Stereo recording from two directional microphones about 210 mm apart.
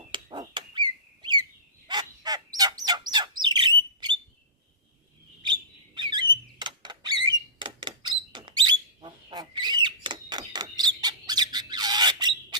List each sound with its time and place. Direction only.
0.1 s a sound: 20° right (ahead or behind)
1.9 s bird: 20° right (ahead or behind)
5.4 s bird: 20° right (ahead or behind)